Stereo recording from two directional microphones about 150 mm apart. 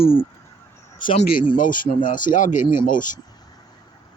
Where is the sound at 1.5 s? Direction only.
65° left (ahead or behind).